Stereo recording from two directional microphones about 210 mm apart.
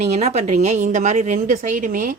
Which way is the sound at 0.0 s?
30° right (ahead or behind).